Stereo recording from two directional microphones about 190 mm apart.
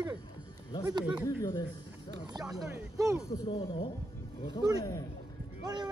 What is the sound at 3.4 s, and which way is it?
Speech, 30° left (ahead or behind).